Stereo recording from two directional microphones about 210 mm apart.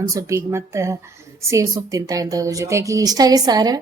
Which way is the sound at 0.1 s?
15° right (ahead or behind).